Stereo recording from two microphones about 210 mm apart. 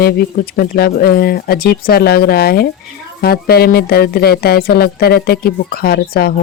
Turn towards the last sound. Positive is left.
turn(degrees=50)  # may be behind; listen again after turning